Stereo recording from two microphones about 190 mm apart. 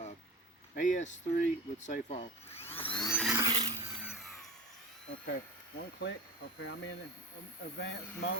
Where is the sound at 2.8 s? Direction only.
25° left (ahead or behind).